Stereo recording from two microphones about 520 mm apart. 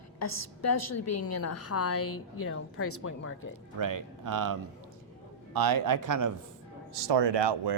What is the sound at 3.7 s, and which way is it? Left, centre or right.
Speech, right.